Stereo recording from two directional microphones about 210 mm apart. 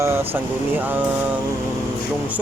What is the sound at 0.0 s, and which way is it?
Speech, 10° right (ahead or behind).